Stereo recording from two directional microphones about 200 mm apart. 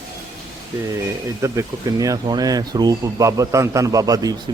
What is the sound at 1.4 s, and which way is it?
Speech, 15° right (ahead or behind).